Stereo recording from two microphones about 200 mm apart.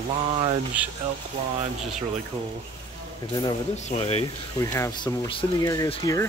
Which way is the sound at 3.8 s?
30° left (ahead or behind).